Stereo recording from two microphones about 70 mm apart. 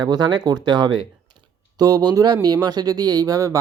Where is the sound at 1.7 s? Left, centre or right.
Right.